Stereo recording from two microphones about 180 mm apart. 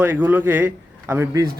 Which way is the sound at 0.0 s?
10° right (ahead or behind).